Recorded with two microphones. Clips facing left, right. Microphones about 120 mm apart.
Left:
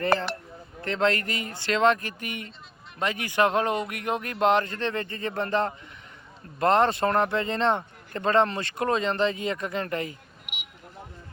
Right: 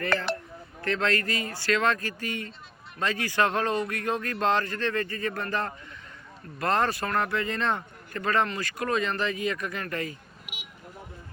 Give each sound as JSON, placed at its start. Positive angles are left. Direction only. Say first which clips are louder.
{"t": 0.8, "sound": "speech", "louder": "left 2 dB", "side_deg": 20}